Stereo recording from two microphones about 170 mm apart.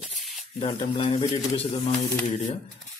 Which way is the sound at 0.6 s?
30° left (ahead or behind).